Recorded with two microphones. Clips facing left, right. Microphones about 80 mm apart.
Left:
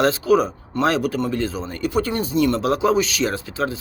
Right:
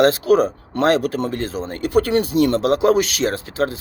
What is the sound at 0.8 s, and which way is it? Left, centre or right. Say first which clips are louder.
Speech: right 3 dB; right.